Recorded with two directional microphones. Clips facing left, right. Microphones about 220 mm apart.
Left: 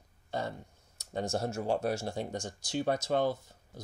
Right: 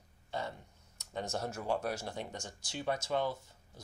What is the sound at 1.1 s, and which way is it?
Speech, 30° left (ahead or behind).